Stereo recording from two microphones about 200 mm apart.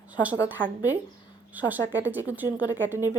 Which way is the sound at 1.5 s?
10° right (ahead or behind).